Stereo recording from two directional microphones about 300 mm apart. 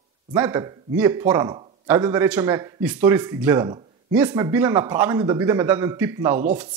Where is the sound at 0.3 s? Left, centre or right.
Centre.